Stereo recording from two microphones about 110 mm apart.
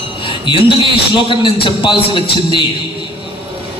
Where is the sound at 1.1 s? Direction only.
45° left (ahead or behind).